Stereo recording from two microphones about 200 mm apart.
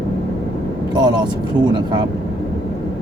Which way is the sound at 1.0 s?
20° right (ahead or behind).